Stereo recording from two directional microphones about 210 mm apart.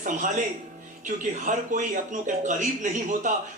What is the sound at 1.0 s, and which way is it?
Speech, 40° right (ahead or behind).